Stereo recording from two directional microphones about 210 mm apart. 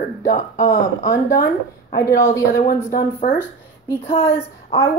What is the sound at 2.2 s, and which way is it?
A woman's voice, 15° left (ahead or behind).